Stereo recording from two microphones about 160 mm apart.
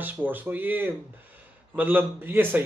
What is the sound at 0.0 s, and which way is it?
Speech, 10° right (ahead or behind).